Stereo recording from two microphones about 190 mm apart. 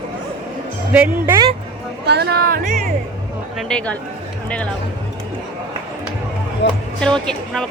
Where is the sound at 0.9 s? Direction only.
5° right (ahead or behind).